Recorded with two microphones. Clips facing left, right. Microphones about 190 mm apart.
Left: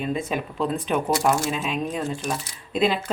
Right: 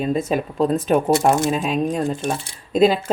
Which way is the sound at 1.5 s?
40° right (ahead or behind).